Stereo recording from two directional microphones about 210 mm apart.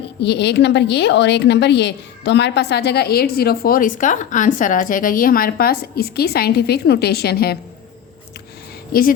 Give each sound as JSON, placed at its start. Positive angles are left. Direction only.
{"t": 0.2, "sound": "a woman's voice", "side_deg": 55}
{"t": 8.9, "sound": "a woman's voice", "side_deg": 45}